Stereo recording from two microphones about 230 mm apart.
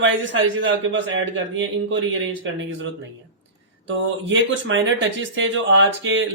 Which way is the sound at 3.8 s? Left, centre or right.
Right.